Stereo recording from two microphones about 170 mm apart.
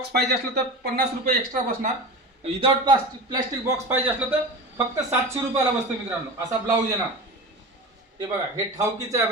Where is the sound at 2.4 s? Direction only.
35° right (ahead or behind).